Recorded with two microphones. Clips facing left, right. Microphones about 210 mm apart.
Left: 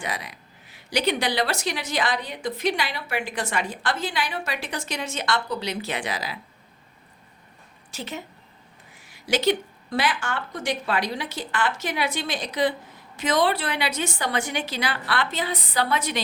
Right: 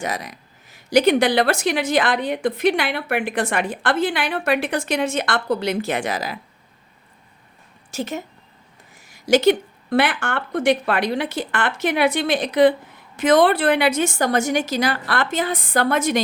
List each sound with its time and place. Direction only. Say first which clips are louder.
0.0 s speech: right 5 dB; 45° right (ahead or behind)
7.9 s a woman's voice: right 7 dB; 45° right (ahead or behind)